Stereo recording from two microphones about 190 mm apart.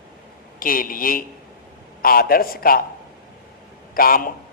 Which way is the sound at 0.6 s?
50° left (ahead or behind).